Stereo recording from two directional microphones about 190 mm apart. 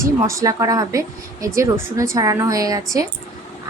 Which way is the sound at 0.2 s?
15° right (ahead or behind).